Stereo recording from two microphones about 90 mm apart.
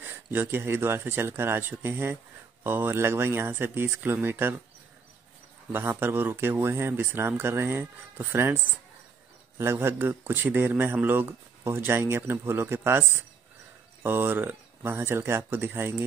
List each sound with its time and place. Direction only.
0.0 s a man's voice: 25° right (ahead or behind)
5.7 s a man's voice: 25° right (ahead or behind)
9.6 s a man's voice: 30° right (ahead or behind)
14.0 s a man's voice: 25° right (ahead or behind)